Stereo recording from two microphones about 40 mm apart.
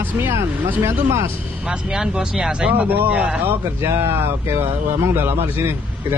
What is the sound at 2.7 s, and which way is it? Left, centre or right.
Speech, right.